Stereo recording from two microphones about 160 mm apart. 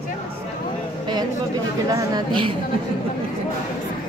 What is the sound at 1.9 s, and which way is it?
Speech, 25° right (ahead or behind).